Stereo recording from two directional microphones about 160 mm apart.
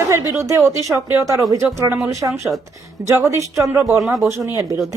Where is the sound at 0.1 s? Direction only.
20° right (ahead or behind).